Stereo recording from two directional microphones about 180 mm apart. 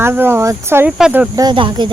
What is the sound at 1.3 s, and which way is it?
Speech, 25° right (ahead or behind).